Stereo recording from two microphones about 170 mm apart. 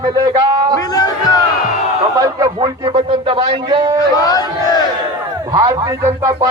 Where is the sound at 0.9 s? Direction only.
20° left (ahead or behind).